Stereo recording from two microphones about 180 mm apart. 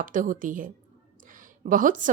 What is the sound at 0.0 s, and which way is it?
A woman's voice, 45° right (ahead or behind).